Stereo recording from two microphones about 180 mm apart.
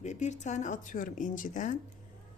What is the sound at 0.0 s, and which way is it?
Speech, 40° left (ahead or behind).